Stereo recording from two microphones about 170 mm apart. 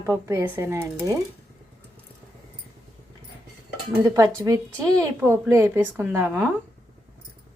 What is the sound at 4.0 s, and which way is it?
Speech, 20° right (ahead or behind).